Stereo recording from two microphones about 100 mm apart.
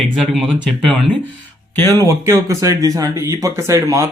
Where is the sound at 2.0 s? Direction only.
30° right (ahead or behind).